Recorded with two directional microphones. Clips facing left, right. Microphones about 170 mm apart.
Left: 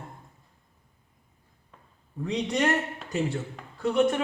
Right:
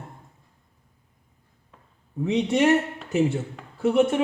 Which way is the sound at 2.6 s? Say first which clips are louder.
Right 6 dB; 5° right (ahead or behind).